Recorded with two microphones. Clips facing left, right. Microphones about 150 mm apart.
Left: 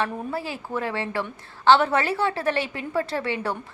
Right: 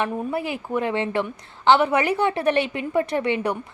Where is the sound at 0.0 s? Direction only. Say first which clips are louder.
Right 3 dB; 15° right (ahead or behind).